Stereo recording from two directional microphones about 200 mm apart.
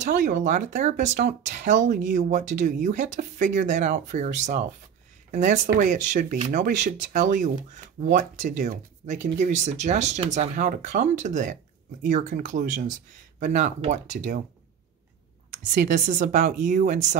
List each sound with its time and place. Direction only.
0.0 s speech: 40° right (ahead or behind)
15.9 s speech: 40° right (ahead or behind)